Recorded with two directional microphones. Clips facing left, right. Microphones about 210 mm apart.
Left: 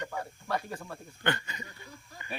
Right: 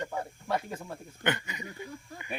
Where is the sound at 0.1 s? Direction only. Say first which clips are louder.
Right 2 dB; 20° right (ahead or behind).